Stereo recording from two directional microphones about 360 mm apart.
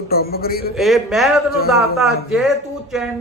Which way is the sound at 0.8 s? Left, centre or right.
Centre.